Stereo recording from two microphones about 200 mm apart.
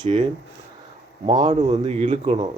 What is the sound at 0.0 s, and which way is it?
Speech, 25° right (ahead or behind).